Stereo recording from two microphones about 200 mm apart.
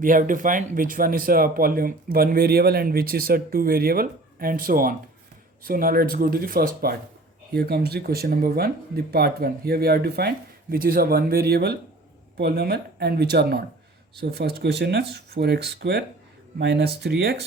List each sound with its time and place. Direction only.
0.0 s speech: 40° right (ahead or behind)